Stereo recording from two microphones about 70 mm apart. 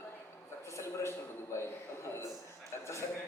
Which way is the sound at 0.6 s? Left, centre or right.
Left.